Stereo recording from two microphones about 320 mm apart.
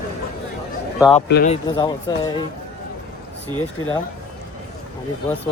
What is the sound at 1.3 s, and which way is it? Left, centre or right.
Speech, left.